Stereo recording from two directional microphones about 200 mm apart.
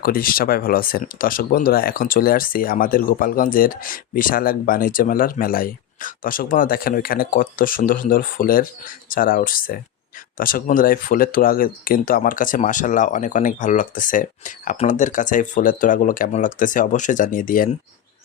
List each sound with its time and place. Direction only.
0.0 s speech: 45° left (ahead or behind)